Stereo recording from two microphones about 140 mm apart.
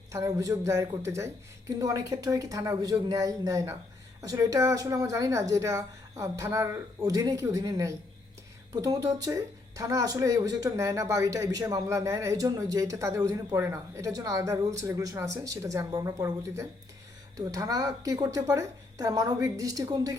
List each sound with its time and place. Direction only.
0.1 s speech: 25° right (ahead or behind)